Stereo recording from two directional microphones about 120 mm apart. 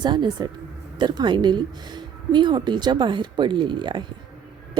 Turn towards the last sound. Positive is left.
turn(degrees=-40)  # may be behind; listen again after turning